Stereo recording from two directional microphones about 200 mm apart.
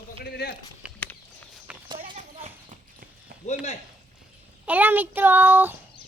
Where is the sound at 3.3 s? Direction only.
50° right (ahead or behind).